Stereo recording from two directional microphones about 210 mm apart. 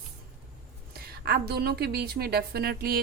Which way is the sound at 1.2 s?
50° right (ahead or behind).